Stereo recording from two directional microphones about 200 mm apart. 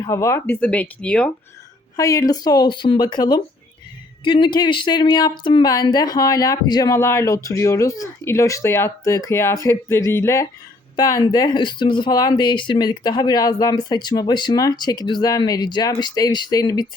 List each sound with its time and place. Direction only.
0.0 s speech: 15° left (ahead or behind)
2.0 s speech: 15° left (ahead or behind)